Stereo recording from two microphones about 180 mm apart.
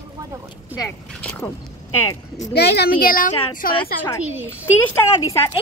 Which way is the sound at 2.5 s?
65° left (ahead or behind).